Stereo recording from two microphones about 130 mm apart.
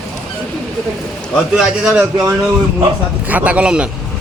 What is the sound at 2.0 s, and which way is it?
A man's voice, 20° right (ahead or behind).